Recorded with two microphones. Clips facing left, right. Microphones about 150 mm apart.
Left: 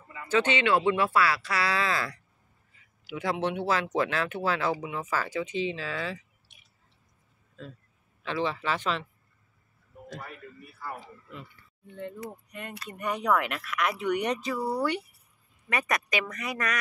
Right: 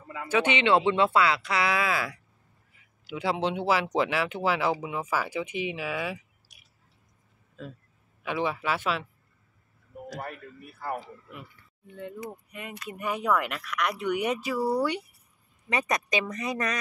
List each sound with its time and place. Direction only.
0.3 s speech: 15° right (ahead or behind)
7.6 s speech: 5° right (ahead or behind)
11.9 s speech: 5° right (ahead or behind); by 16.7 s 20° right (ahead or behind)